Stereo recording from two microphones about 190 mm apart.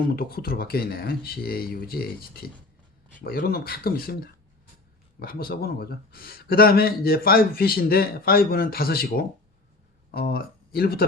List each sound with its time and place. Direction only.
0.1 s a man's voice: 50° left (ahead or behind)